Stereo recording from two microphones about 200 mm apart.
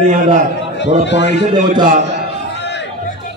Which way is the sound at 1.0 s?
60° left (ahead or behind).